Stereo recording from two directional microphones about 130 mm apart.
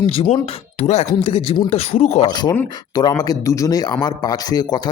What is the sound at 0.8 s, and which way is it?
Speech, 55° left (ahead or behind).